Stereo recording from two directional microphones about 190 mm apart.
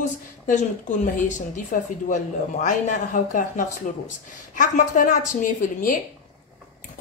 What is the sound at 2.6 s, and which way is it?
A woman's voice, 40° left (ahead or behind).